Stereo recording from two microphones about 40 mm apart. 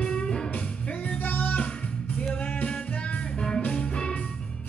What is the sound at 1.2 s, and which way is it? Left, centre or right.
Music, left.